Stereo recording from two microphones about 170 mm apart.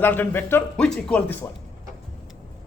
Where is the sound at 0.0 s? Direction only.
10° left (ahead or behind).